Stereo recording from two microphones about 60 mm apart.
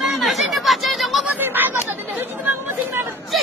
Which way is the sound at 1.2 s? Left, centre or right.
Right.